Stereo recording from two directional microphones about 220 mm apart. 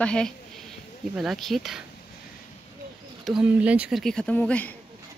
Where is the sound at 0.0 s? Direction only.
5° left (ahead or behind).